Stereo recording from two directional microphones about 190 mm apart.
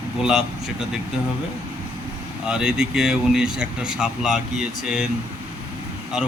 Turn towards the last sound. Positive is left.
turn(degrees=-5)  # may be behind; listen again after turning